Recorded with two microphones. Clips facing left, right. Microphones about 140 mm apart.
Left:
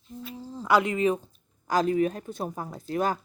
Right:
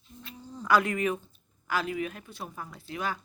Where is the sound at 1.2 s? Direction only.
40° left (ahead or behind).